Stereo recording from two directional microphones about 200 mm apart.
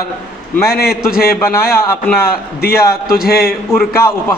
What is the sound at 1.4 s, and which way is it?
Speech, 10° left (ahead or behind).